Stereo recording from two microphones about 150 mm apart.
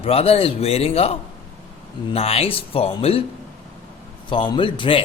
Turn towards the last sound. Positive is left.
turn(degrees=35)  # may be behind; listen again after turning